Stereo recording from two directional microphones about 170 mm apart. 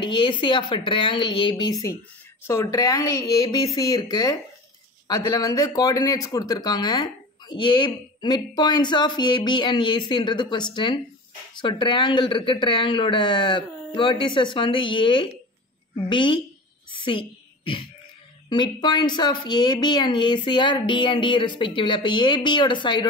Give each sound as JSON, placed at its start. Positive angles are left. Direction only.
{"t": 0.0, "sound": "speech", "side_deg": 30}
{"t": 17.0, "sound": "a sound", "side_deg": 30}
{"t": 18.5, "sound": "speech", "side_deg": 25}